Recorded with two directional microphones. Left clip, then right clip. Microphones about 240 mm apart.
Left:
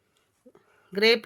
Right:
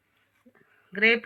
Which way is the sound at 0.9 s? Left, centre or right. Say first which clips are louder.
Left 1 dB; left.